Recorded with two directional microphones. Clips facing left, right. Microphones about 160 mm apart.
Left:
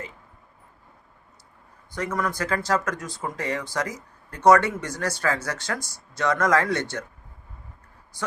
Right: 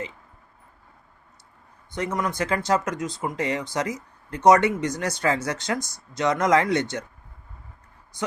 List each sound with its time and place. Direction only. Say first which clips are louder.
1.9 s speech: right 1 dB; 20° right (ahead or behind)